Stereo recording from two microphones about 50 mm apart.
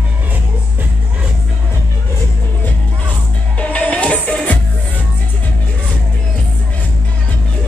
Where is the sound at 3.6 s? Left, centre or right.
Left.